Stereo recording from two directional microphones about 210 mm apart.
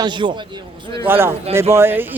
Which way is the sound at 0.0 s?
20° right (ahead or behind).